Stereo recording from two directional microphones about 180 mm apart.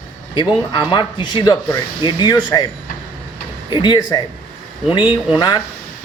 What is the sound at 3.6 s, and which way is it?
Speech, 25° left (ahead or behind).